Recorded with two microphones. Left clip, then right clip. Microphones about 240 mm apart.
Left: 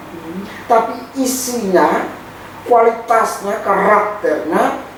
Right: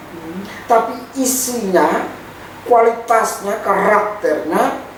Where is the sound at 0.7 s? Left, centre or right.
Centre.